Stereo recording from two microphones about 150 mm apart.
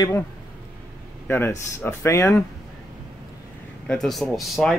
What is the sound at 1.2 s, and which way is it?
Speech, 15° left (ahead or behind).